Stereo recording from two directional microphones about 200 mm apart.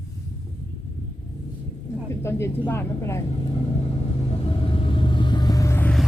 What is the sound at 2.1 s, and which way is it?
Speech, 15° left (ahead or behind).